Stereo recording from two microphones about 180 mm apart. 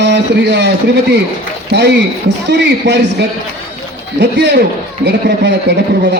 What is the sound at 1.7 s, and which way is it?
A man's voice, 70° right (ahead or behind).